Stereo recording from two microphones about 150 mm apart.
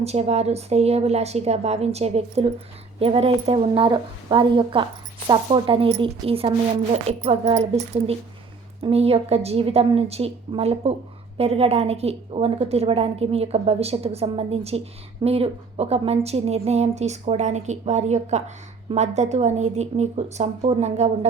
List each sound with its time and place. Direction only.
0.0 s a woman's voice: 45° right (ahead or behind)
8.8 s a woman's voice: 40° right (ahead or behind)